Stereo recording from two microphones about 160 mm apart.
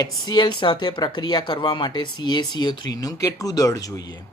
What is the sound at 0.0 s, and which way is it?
Speech, 25° left (ahead or behind).